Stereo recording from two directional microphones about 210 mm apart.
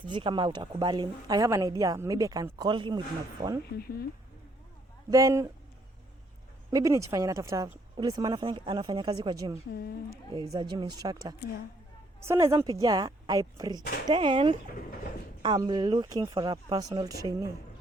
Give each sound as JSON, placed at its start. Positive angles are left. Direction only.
{"t": 0.0, "sound": "speech", "side_deg": -25}
{"t": 3.4, "sound": "speech", "side_deg": -35}
{"t": 5.1, "sound": "speech", "side_deg": -15}
{"t": 6.7, "sound": "speech", "side_deg": -15}